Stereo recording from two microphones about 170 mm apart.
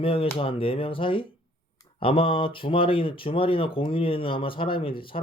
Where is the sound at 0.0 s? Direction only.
35° left (ahead or behind).